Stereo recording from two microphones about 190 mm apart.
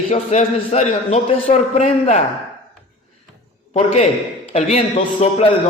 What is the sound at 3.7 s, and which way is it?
A man's voice, 35° left (ahead or behind).